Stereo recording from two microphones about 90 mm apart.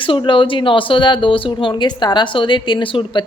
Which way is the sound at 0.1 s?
70° left (ahead or behind).